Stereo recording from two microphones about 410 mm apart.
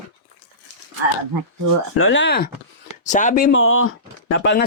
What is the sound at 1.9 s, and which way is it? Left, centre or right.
Speech, left.